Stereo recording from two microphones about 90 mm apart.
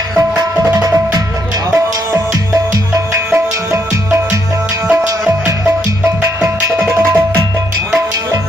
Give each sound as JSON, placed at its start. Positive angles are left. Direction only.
{"t": 0.4, "sound": "music", "side_deg": -45}
{"t": 3.1, "sound": "music", "side_deg": -30}
{"t": 6.4, "sound": "music", "side_deg": -30}